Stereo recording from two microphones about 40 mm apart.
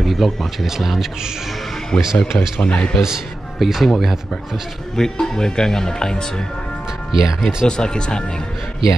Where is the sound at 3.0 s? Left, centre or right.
Centre.